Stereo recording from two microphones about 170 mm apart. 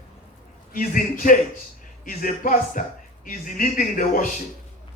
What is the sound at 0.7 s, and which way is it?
A woman's voice, 55° left (ahead or behind).